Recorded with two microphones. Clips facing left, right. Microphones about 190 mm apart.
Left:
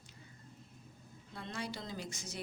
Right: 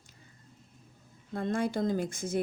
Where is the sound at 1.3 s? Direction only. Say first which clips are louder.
Right 13 dB; 50° right (ahead or behind).